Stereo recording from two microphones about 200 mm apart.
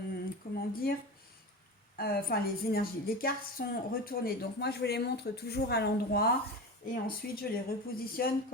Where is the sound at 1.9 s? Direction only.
50° left (ahead or behind).